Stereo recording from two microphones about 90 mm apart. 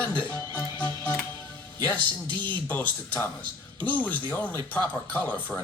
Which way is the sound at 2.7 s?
20° left (ahead or behind).